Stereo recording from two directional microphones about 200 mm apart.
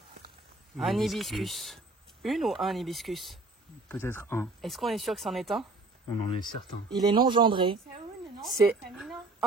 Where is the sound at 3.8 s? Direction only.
10° left (ahead or behind).